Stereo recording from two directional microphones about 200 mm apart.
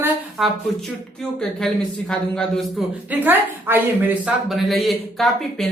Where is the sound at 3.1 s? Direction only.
10° right (ahead or behind).